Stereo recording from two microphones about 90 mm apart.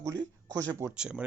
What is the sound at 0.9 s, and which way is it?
Speech, 10° right (ahead or behind).